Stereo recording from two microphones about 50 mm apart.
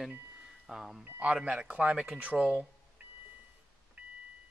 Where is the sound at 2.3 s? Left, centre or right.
Centre.